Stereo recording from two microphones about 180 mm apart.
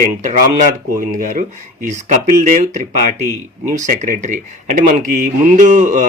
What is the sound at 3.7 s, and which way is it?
Speech, 45° right (ahead or behind).